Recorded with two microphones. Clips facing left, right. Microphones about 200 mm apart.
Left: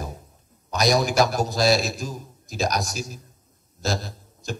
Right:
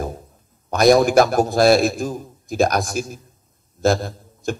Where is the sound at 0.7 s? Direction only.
55° right (ahead or behind).